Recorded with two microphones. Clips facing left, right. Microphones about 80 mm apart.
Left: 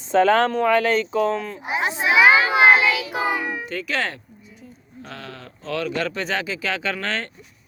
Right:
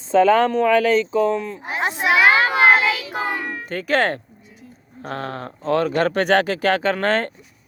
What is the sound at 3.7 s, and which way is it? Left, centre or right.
Speech, right.